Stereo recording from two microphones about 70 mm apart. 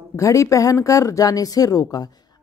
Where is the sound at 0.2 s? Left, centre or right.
Left.